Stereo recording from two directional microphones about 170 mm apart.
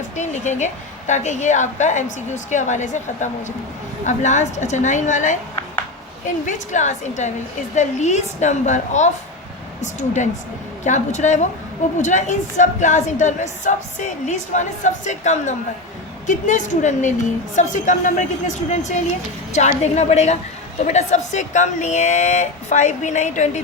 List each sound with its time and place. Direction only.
0.2 s a woman's voice: 45° left (ahead or behind)